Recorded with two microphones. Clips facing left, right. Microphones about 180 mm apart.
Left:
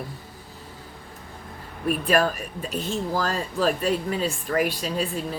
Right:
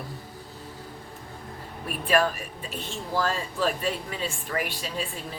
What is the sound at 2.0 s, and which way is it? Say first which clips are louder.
Speech: even; 45° left (ahead or behind).